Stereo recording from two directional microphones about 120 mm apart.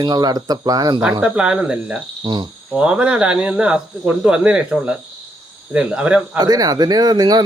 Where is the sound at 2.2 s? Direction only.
40° right (ahead or behind).